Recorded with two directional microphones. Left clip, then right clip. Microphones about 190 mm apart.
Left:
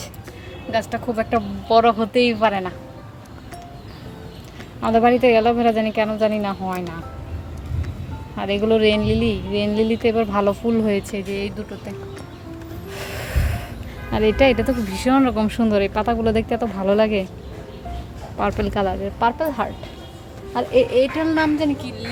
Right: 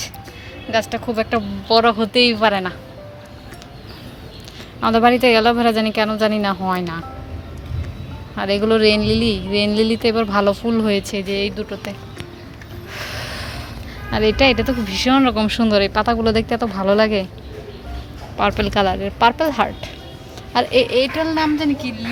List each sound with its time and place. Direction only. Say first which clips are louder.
0.7 s speech: right 3 dB; 10° left (ahead or behind)
4.8 s speech: right 2 dB; 5° right (ahead or behind)
8.4 s speech: right 2 dB; 5° right (ahead or behind)
12.9 s gasp: right 2 dB; 35° left (ahead or behind)
14.1 s speech: right 1 dB; 10° left (ahead or behind)
18.3 s speech: right 4 dB; centre (ahead or behind); by 19.7 s 20° right (ahead or behind)
20.5 s speech: right 2 dB; 10° right (ahead or behind)